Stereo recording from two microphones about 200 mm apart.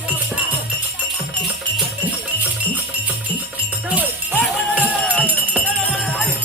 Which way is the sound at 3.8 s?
5° right (ahead or behind).